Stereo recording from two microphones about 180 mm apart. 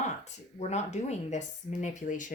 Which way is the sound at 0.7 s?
40° left (ahead or behind).